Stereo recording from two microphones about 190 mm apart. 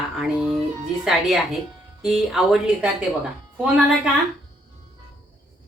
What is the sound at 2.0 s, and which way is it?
Speech, 5° right (ahead or behind).